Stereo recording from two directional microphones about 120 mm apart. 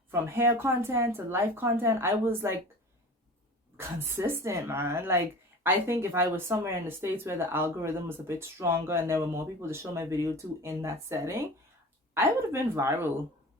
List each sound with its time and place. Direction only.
0.1 s speech: 20° right (ahead or behind)
3.8 s speech: 20° right (ahead or behind)